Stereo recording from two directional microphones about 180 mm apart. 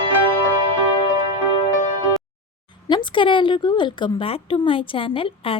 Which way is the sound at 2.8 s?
25° left (ahead or behind).